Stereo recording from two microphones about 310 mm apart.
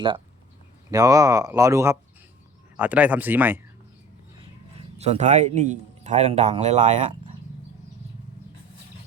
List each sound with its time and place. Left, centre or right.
0.9 s speech: centre
4.9 s a man's voice: right